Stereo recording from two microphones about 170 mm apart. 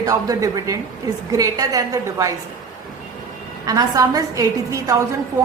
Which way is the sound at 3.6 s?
20° right (ahead or behind).